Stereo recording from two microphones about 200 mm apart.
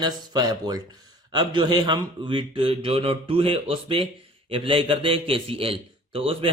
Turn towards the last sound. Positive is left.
turn(degrees=-25)  # may be behind; listen again after turning